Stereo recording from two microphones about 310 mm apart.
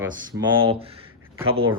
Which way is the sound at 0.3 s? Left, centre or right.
Centre.